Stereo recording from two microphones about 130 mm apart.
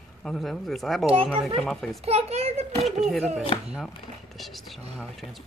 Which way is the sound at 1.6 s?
5° left (ahead or behind).